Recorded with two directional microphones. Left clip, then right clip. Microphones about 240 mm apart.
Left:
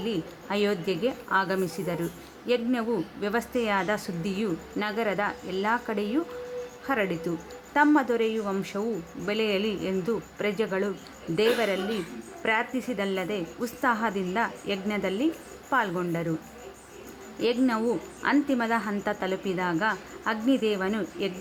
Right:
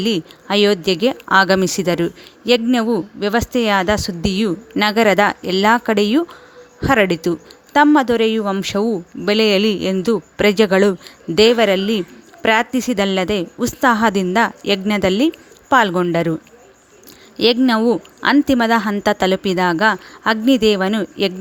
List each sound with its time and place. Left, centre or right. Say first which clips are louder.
0.0 s a woman's voice: right 11 dB; right
17.4 s speech: right 11 dB; right